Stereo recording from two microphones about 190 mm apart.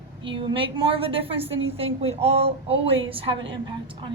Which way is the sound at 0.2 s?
25° right (ahead or behind).